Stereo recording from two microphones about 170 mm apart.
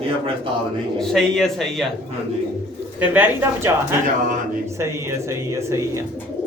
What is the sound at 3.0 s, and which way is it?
Speech, 10° right (ahead or behind).